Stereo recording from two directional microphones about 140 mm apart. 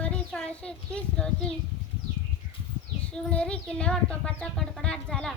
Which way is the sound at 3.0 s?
10° left (ahead or behind).